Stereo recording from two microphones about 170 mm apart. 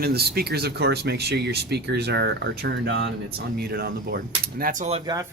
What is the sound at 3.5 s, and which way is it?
Speech, 65° right (ahead or behind).